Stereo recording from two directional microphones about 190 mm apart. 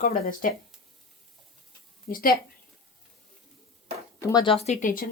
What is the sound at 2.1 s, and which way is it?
Speech, 50° left (ahead or behind).